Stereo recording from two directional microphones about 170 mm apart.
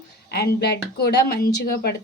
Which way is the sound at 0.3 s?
70° left (ahead or behind).